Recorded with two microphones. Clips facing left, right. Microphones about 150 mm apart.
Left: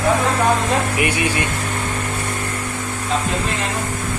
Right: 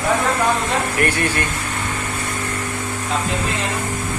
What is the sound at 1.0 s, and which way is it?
Speech, 10° left (ahead or behind).